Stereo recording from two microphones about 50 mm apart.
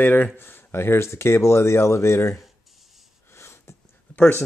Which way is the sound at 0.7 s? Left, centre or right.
Left.